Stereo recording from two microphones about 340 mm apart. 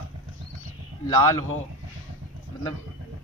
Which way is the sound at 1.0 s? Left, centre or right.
Centre.